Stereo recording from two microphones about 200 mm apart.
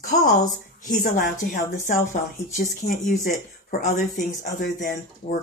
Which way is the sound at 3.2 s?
45° left (ahead or behind).